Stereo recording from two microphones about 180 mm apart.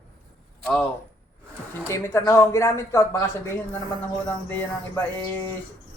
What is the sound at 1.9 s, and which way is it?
Speech, 15° left (ahead or behind).